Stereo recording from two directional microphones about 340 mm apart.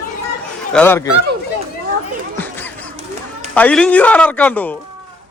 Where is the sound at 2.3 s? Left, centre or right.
Centre.